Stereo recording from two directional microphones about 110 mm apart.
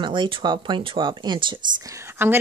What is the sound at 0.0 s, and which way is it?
Speech, 45° right (ahead or behind).